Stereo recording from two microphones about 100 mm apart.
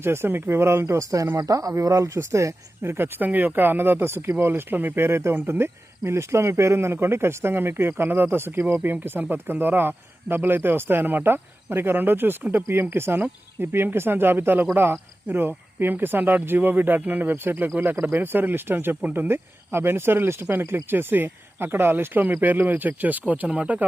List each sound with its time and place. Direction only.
0.0 s speech: 25° right (ahead or behind)